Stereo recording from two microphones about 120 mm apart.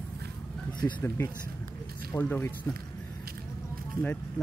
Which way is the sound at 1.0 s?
20° left (ahead or behind).